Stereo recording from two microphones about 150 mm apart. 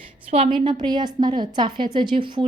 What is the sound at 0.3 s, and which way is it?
A woman's voice, 40° right (ahead or behind).